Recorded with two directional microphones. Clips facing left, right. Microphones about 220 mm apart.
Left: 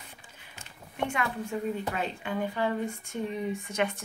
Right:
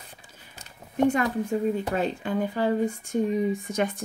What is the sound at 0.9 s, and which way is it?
Speech, 40° right (ahead or behind).